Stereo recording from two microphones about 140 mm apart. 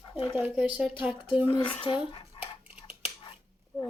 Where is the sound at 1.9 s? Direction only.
40° left (ahead or behind).